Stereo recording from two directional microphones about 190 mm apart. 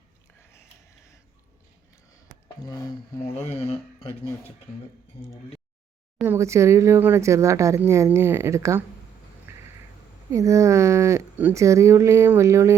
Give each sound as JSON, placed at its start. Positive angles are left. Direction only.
{"t": 3.5, "sound": "speech", "side_deg": 30}
{"t": 6.2, "sound": "speech", "side_deg": -15}
{"t": 10.3, "sound": "speech", "side_deg": -15}